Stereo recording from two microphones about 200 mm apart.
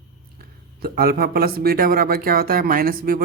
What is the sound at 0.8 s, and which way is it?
Speech, 50° right (ahead or behind).